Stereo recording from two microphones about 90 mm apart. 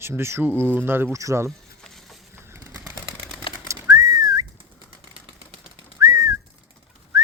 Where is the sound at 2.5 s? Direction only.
35° right (ahead or behind).